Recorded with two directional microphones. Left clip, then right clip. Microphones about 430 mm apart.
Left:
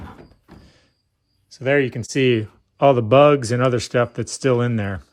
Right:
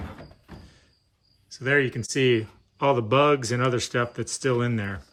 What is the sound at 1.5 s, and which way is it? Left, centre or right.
Speech, centre.